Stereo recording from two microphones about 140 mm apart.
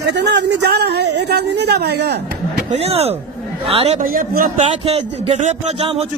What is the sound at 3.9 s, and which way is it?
Speech, 85° right.